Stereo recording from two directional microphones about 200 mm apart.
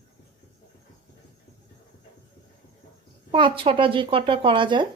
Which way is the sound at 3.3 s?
25° right (ahead or behind).